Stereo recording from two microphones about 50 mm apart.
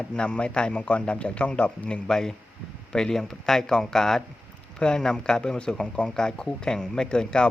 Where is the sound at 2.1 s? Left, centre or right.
Centre.